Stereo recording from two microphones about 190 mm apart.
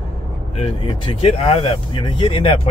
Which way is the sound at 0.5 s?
30° left (ahead or behind).